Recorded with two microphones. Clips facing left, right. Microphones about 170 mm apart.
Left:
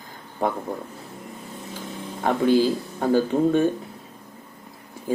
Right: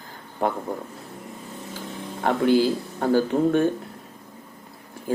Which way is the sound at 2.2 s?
10° left (ahead or behind).